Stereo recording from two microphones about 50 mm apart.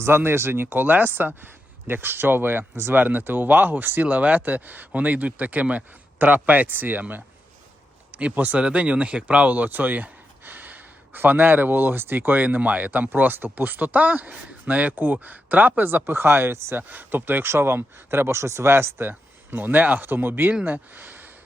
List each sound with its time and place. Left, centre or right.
0.0 s speech: right
8.1 s speech: right
15.9 s speech: right
16.7 s speech: right
17.5 s speech: right